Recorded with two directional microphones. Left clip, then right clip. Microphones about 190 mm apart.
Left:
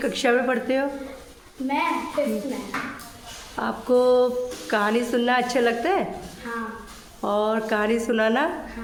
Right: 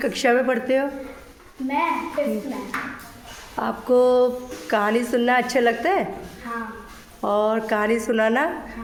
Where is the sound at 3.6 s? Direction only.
5° right (ahead or behind).